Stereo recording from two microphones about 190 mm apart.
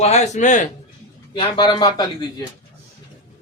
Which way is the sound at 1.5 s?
20° left (ahead or behind).